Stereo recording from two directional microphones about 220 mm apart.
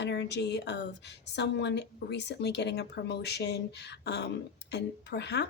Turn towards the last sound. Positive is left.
turn(degrees=50)  # may be behind; listen again after turning